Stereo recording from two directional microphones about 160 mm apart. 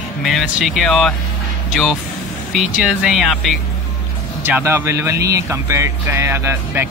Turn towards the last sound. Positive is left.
turn(degrees=-15)  # may be behind; listen again after turning